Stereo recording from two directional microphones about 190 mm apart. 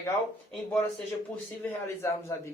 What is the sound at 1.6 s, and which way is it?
Speech, 10° left (ahead or behind).